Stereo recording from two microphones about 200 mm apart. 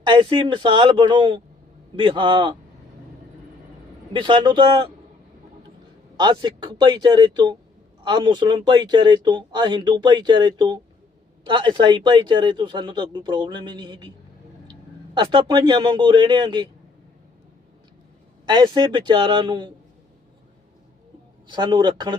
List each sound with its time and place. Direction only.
0.0 s speech: 25° right (ahead or behind)
4.1 s speech: 25° right (ahead or behind)
6.1 s speech: 20° right (ahead or behind)
18.4 s speech: 20° right (ahead or behind)
21.4 s speech: 20° right (ahead or behind)